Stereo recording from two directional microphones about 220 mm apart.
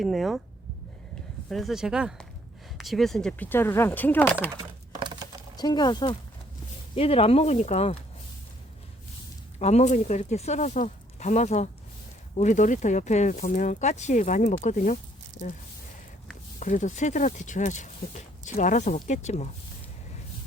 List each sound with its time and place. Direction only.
0.0 s speech: centre (ahead or behind)
1.5 s speech: centre (ahead or behind)
4.5 s a sound: 20° right (ahead or behind)
5.5 s speech: 20° left (ahead or behind)
9.6 s speech: 30° left (ahead or behind)
16.6 s speech: 35° left (ahead or behind)